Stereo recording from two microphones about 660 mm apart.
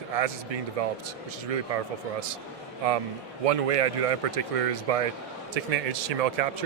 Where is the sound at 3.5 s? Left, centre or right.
Right.